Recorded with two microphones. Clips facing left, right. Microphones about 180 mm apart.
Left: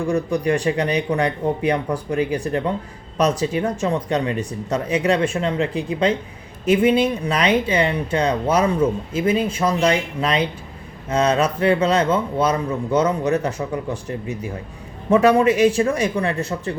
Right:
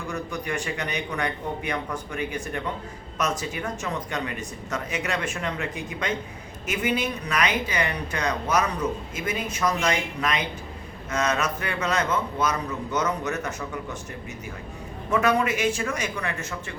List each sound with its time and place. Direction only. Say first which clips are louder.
0.1 s a man's voice: left 10 dB; 35° left (ahead or behind)